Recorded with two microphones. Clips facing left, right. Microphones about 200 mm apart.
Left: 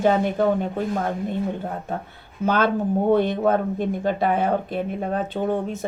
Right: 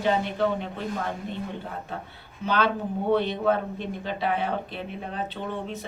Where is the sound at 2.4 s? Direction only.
45° left (ahead or behind).